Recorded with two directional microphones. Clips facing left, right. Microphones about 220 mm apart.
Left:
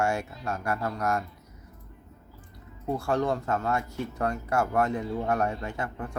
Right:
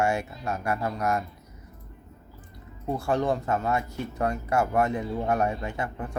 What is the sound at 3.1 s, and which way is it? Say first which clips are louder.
Speech: right 2 dB; 20° right (ahead or behind).